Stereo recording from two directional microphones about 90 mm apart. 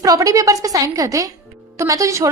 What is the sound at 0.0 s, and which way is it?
Speech, 40° right (ahead or behind).